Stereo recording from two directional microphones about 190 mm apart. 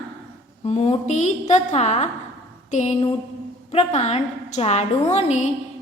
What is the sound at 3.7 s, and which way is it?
A woman's voice, 35° left (ahead or behind).